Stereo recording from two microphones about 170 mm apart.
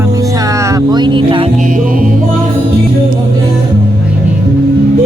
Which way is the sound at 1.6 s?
55° right (ahead or behind).